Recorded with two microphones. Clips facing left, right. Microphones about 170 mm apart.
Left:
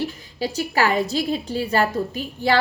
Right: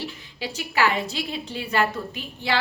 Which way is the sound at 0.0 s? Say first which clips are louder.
Left 7 dB; 40° left (ahead or behind).